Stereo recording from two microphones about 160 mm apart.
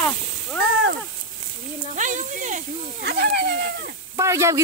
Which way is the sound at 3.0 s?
90° right.